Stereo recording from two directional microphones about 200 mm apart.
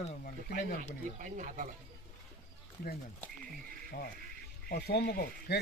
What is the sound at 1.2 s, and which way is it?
Speech, 40° right (ahead or behind).